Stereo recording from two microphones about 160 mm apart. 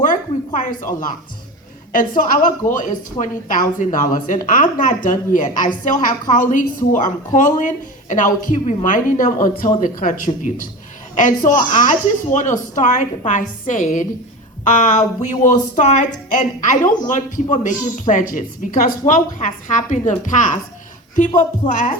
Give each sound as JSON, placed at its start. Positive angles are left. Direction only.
{"t": 0.0, "sound": "a sound", "side_deg": 55}
{"t": 1.9, "sound": "speech", "side_deg": 55}
{"t": 21.7, "sound": "speech", "side_deg": 50}